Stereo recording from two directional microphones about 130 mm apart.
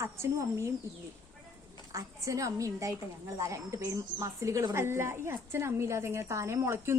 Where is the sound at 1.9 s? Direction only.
25° right (ahead or behind).